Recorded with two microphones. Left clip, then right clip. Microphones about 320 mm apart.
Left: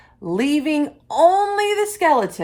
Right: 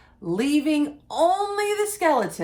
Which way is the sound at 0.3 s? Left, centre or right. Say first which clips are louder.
Left 3 dB; left.